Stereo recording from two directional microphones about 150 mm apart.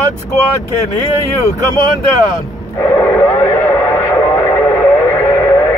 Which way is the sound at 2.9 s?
20° left (ahead or behind).